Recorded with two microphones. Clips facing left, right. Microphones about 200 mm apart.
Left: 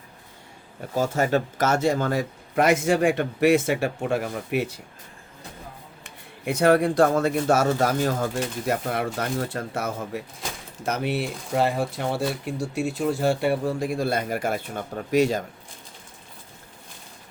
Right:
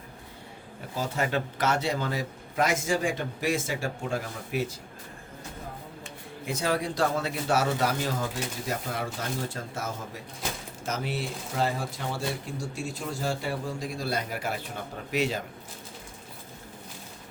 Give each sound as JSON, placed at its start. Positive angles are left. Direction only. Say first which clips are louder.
{"t": 0.9, "sound": "a man's voice", "louder": "left 7 dB", "side_deg": 45}
{"t": 6.4, "sound": "a man's voice", "louder": "left 10 dB", "side_deg": 60}